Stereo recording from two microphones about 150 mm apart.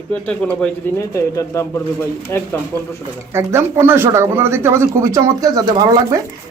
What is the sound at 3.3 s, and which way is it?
A man's voice, 15° right (ahead or behind).